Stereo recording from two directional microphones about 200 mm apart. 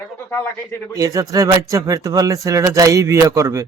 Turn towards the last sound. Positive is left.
turn(degrees=-15)  # may be behind; listen again after turning